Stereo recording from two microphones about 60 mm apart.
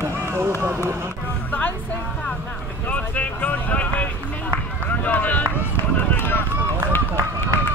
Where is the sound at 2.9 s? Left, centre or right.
Left.